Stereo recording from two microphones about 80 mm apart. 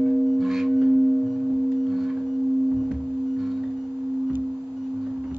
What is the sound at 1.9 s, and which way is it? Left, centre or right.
Singing bowl, centre.